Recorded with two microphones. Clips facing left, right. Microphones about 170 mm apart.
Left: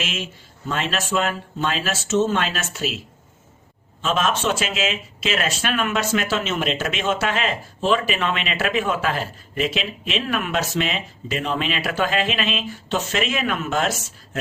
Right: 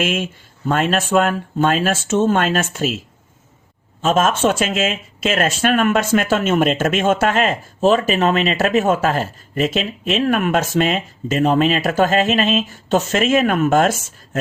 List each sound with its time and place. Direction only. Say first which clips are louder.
0.0 s speech: right 9 dB; 50° right (ahead or behind)
4.0 s speech: right 6 dB; 45° right (ahead or behind)